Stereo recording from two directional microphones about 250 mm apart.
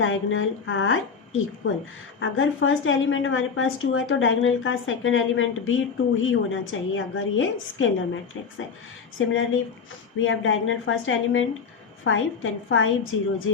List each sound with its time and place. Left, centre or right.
0.0 s a woman's voice: left
9.1 s a woman's voice: left